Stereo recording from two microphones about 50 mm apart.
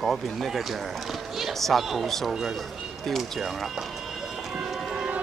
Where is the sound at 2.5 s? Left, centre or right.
Centre.